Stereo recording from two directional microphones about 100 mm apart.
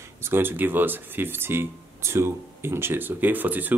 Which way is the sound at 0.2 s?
20° right (ahead or behind).